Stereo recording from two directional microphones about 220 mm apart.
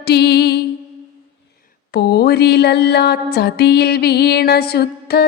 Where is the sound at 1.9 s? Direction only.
50° left (ahead or behind).